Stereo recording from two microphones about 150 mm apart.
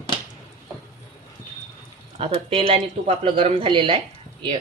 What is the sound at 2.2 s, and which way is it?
Speech, 40° right (ahead or behind).